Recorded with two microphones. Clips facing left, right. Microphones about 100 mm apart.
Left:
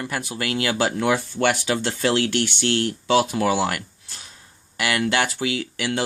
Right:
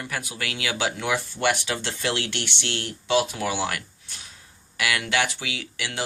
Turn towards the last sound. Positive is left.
turn(degrees=40)  # may be behind; listen again after turning